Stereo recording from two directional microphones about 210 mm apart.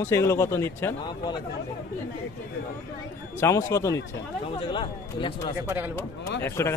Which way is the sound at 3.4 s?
15° left (ahead or behind).